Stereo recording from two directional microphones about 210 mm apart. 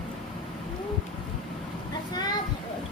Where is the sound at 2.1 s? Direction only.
20° left (ahead or behind).